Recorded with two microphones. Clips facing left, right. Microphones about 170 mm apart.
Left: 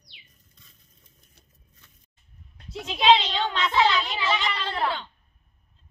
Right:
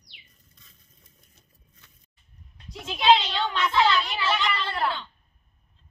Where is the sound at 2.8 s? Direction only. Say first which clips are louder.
Left 1 dB; 15° left (ahead or behind).